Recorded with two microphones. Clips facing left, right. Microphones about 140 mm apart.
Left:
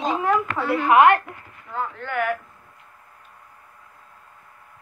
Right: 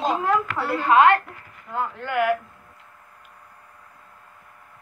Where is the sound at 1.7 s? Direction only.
5° right (ahead or behind).